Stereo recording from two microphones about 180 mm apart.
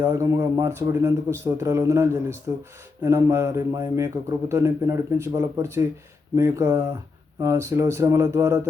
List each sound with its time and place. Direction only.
0.0 s a man's voice: 15° right (ahead or behind)